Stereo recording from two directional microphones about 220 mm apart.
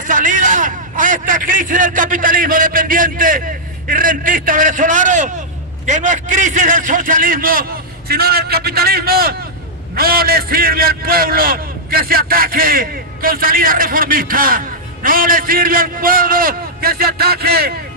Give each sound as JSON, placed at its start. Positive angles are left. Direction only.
{"t": 0.0, "sound": "a man's voice", "side_deg": -35}